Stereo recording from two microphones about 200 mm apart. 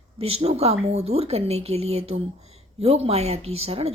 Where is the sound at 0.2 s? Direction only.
30° right (ahead or behind).